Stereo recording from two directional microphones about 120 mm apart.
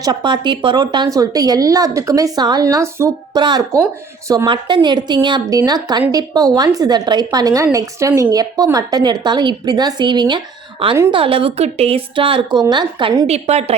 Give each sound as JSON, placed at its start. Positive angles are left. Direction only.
{"t": 0.0, "sound": "a woman's voice", "side_deg": -40}
{"t": 3.3, "sound": "a woman's voice", "side_deg": -35}
{"t": 4.4, "sound": "a woman's voice", "side_deg": -40}
{"t": 13.2, "sound": "a woman's voice", "side_deg": -60}